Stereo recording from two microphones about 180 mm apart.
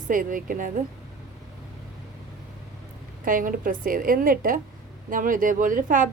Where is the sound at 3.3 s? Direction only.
50° right (ahead or behind).